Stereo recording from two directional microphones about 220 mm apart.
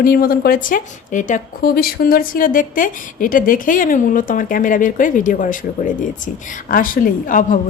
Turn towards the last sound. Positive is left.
turn(degrees=35)  # may be behind; listen again after turning